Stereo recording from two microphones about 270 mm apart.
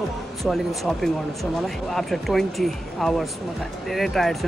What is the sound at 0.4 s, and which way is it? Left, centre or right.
Speech, centre.